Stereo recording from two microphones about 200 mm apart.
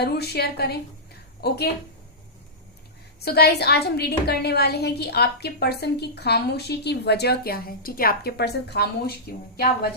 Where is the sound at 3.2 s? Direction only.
55° left (ahead or behind).